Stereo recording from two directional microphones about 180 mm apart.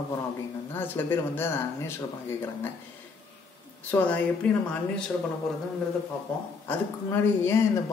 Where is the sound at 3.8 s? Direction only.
10° left (ahead or behind).